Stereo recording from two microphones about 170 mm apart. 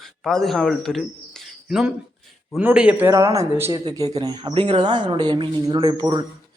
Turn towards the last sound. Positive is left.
turn(degrees=-25)  # may be behind; listen again after turning